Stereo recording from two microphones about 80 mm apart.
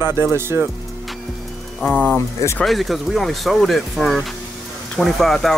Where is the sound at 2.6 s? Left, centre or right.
Centre.